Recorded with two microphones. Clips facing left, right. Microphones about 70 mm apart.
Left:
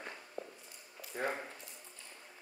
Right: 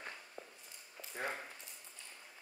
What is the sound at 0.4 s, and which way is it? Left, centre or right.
Walk, centre.